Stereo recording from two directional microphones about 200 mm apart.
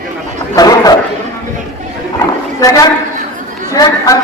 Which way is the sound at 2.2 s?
15° left (ahead or behind).